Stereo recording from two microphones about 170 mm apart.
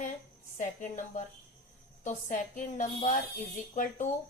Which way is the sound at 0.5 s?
50° left (ahead or behind).